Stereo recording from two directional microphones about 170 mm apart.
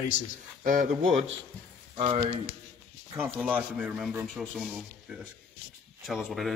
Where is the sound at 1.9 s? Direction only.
30° right (ahead or behind).